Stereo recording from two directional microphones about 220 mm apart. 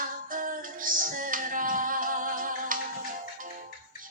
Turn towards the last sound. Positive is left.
turn(degrees=-40)  # may be behind; listen again after turning